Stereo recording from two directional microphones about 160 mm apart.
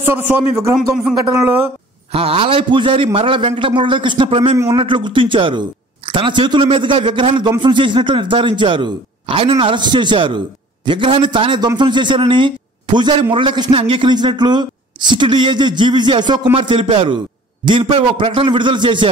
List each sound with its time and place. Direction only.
0.1 s a man's voice: 15° right (ahead or behind)
0.7 s speech: centre (ahead or behind)
1.3 s a man's voice: 15° right (ahead or behind)
2.1 s a man's voice: 35° right (ahead or behind)